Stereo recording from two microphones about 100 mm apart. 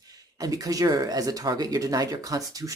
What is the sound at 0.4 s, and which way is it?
Speech, 35° right (ahead or behind).